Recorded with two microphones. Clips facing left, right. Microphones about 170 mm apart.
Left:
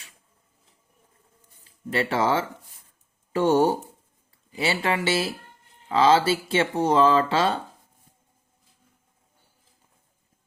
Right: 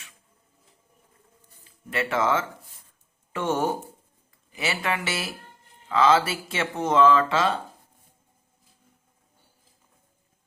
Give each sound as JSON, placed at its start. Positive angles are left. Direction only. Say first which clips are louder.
{"t": 1.9, "sound": "speech", "louder": "left 1 dB", "side_deg": 30}